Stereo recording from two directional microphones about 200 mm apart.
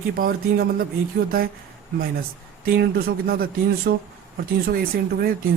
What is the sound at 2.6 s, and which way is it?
A man's voice, 50° right (ahead or behind).